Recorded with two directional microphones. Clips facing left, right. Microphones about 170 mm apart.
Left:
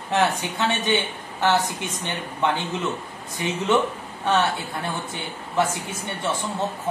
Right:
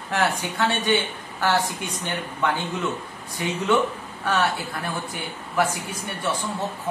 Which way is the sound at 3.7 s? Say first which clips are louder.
Even; 25° left (ahead or behind).